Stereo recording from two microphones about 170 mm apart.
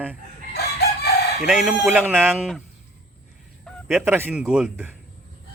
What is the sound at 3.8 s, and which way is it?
A man's voice, 5° right (ahead or behind).